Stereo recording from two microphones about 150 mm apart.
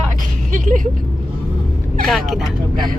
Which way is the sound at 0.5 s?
60° right (ahead or behind).